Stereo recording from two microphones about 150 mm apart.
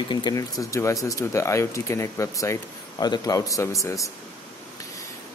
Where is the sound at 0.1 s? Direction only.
30° left (ahead or behind).